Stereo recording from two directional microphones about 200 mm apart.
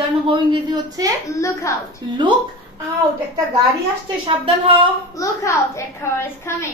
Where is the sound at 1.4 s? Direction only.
15° left (ahead or behind).